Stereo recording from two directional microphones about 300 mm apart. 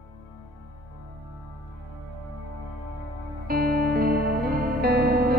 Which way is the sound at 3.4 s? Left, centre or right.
Right.